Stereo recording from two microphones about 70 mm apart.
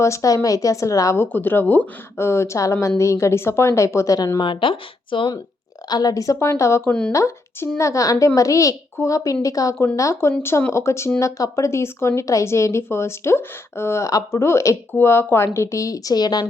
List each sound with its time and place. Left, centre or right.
0.0 s a woman's voice: left
1.1 s speech: left
2.1 s a woman's voice: left
5.9 s a woman's voice: left
11.2 s a woman's voice: left
14.9 s speech: left
15.5 s a woman's voice: left